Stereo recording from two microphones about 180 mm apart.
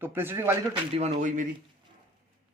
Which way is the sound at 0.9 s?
35° right (ahead or behind).